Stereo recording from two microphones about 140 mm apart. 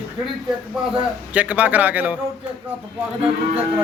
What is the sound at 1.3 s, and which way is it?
Speech, 10° right (ahead or behind).